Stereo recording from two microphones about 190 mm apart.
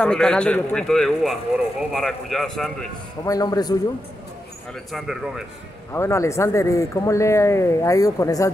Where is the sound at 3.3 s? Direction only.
20° left (ahead or behind).